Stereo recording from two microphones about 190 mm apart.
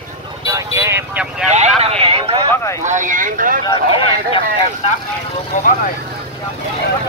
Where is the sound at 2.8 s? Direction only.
40° right (ahead or behind).